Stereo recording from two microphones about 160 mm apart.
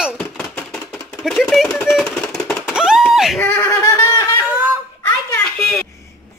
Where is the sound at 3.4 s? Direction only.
10° left (ahead or behind).